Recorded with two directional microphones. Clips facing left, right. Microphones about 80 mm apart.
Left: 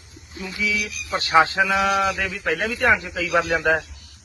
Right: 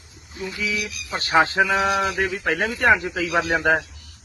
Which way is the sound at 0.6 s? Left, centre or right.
Right.